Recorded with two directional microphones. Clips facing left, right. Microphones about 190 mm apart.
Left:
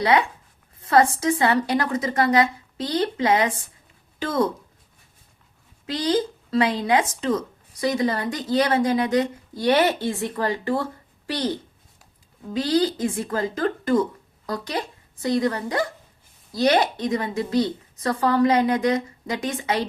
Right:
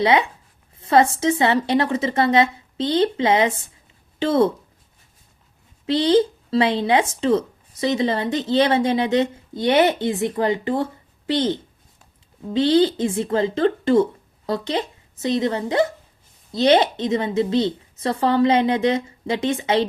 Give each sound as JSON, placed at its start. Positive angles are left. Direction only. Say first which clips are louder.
{"t": 0.0, "sound": "speech", "louder": "right 2 dB", "side_deg": -20}
{"t": 5.8, "sound": "a woman's voice", "louder": "right 6 dB", "side_deg": -25}